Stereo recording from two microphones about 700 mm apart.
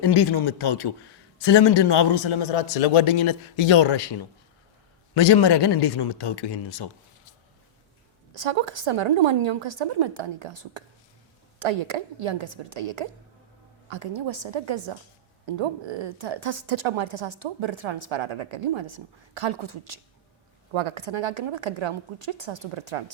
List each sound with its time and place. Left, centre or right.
0.0 s a man's voice: left
8.3 s a woman's voice: right